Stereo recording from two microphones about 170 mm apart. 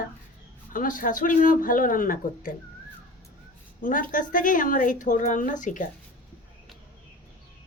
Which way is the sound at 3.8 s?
50° left (ahead or behind).